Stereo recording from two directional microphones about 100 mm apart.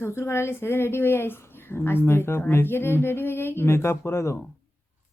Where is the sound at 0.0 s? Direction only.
25° left (ahead or behind).